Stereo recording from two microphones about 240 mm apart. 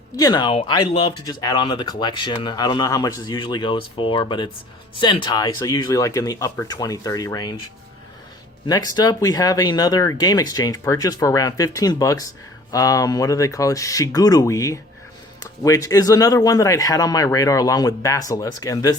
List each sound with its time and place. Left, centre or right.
0.2 s speech: centre
8.6 s speech: centre